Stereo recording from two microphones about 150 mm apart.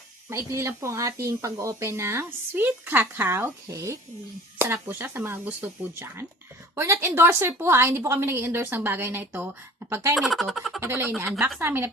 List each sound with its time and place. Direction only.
0.3 s a woman's voice: 20° right (ahead or behind)
10.2 s speech: centre (ahead or behind)
10.8 s a woman's voice: 15° right (ahead or behind)